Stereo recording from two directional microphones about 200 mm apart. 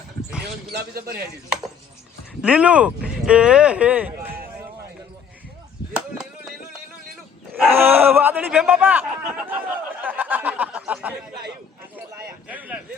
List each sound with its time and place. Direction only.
0.7 s speech: 50° right (ahead or behind)
2.4 s speech: 5° right (ahead or behind)
5.9 s chop: 5° right (ahead or behind)
7.5 s speech: 10° right (ahead or behind)
10.0 s a sound: 10° right (ahead or behind)
12.5 s a sound: 5° right (ahead or behind)